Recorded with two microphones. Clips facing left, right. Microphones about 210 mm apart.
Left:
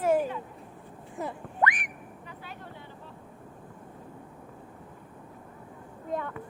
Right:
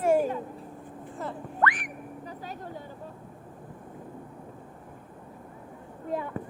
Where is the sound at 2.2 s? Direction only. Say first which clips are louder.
Right 4 dB; 40° right (ahead or behind).